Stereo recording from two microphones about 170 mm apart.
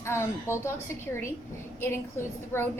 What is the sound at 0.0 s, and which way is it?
Speech, 15° left (ahead or behind).